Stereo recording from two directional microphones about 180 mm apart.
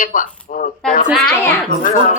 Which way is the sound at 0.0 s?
50° left (ahead or behind).